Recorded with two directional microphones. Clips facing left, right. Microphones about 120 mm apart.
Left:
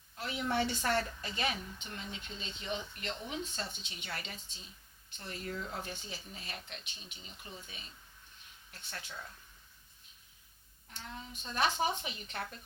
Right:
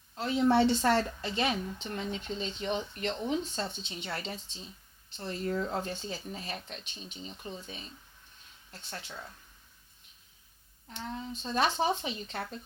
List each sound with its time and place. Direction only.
0.2 s speech: 30° right (ahead or behind)
8.9 s speech: 25° right (ahead or behind)
11.1 s speech: 30° right (ahead or behind)